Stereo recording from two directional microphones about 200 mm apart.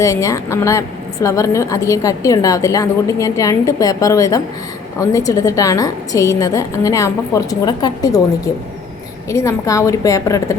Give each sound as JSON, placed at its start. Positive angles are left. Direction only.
{"t": 0.0, "sound": "a woman's voice", "side_deg": 15}
{"t": 9.3, "sound": "a woman's voice", "side_deg": 15}